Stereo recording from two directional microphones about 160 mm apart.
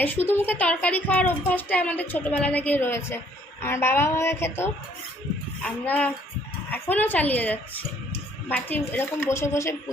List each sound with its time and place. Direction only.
0.0 s a woman's voice: 10° left (ahead or behind)